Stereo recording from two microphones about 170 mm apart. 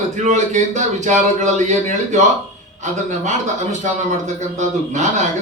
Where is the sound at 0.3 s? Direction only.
45° right (ahead or behind).